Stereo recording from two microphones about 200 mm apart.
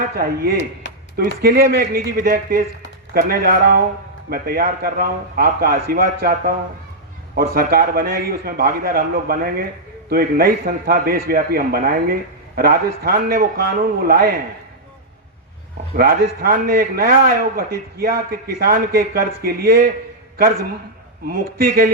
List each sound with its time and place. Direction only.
0.0 s a man's voice: 45° right (ahead or behind)
0.5 s speech: 65° left (ahead or behind)
1.4 s a man's voice: 50° right (ahead or behind)
16.0 s a man's voice: 50° right (ahead or behind)
21.2 s a man's voice: 45° right (ahead or behind)